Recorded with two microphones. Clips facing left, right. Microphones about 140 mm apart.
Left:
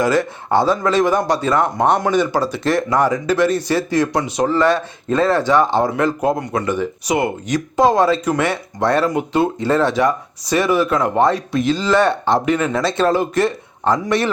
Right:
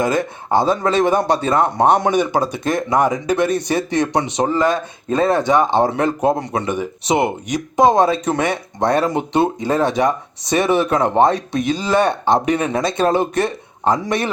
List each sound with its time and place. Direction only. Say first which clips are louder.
0.0 s speech: left 2 dB; 20° right (ahead or behind)